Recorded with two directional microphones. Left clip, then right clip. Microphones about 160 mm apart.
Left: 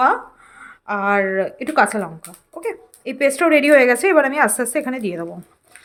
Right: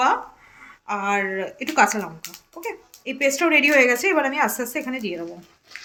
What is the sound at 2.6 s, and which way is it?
A woman's voice, 65° left (ahead or behind).